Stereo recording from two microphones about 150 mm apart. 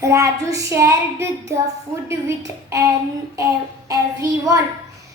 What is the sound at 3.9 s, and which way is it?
Child singing, 20° right (ahead or behind).